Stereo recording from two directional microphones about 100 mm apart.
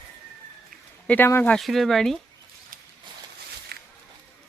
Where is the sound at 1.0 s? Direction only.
20° left (ahead or behind).